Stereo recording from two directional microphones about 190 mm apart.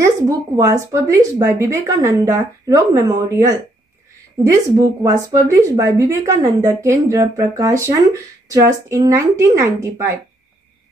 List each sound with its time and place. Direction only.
0.6 s a woman's voice: 15° right (ahead or behind)